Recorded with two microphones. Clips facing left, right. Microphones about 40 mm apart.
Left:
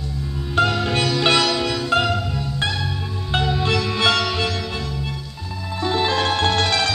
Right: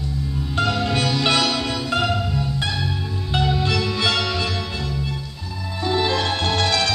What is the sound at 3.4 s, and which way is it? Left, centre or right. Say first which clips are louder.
Music: even; centre.